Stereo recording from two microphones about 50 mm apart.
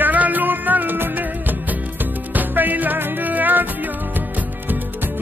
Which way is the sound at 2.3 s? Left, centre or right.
Right.